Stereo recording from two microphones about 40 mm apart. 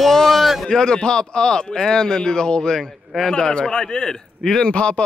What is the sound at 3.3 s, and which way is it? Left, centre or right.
A man's voice, centre.